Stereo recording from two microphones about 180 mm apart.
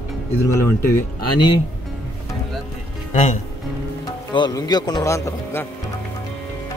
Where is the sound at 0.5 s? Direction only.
15° left (ahead or behind).